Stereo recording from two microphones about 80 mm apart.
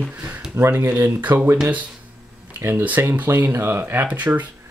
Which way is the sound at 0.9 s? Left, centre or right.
Right.